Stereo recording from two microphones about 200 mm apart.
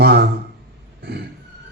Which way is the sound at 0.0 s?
55° right (ahead or behind).